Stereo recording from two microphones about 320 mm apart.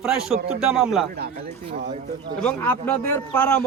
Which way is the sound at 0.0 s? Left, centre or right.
Centre.